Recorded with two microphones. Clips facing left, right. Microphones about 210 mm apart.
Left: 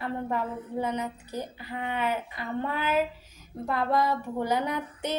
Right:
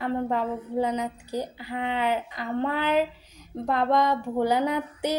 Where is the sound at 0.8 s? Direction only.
15° right (ahead or behind).